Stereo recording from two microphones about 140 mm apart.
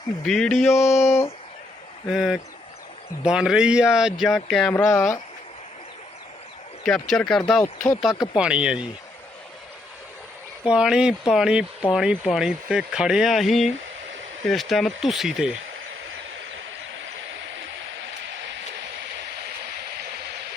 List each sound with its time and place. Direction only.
0.3 s speech: 5° left (ahead or behind)
0.7 s speech: 20° left (ahead or behind)
2.0 s speech: 5° right (ahead or behind)
4.7 s speech: 20° left (ahead or behind)
6.8 s speech: 5° left (ahead or behind)
8.1 s speech: 30° left (ahead or behind)
8.4 s speech: 5° right (ahead or behind)
10.6 s speech: 5° right (ahead or behind)